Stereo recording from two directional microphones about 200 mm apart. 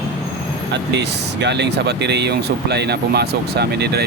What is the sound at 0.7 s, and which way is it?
Speech, 60° right (ahead or behind).